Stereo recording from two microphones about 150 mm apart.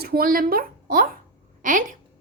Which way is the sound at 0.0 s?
85° right.